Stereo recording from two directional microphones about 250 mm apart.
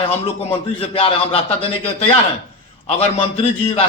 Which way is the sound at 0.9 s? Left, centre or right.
Left.